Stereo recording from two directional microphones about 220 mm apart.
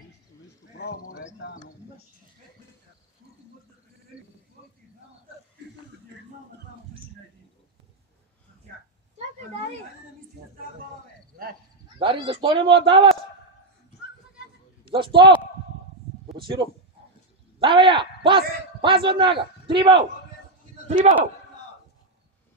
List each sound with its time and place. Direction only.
0.7 s a sound: 45° left (ahead or behind)
12.0 s a man's voice: 25° right (ahead or behind)
14.9 s a man's voice: 25° right (ahead or behind)
17.6 s a man's voice: 25° right (ahead or behind)